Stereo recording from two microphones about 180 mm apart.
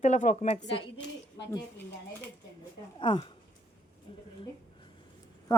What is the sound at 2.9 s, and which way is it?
Speech, 25° left (ahead or behind).